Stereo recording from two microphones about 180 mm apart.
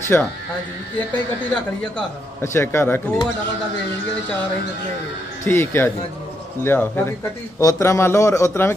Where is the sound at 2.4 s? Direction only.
15° left (ahead or behind).